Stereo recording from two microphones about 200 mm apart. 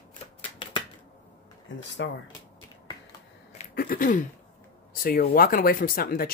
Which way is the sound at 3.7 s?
45° left (ahead or behind).